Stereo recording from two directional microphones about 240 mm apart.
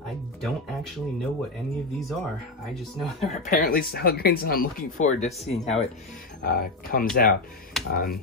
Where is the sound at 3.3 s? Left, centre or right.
Left.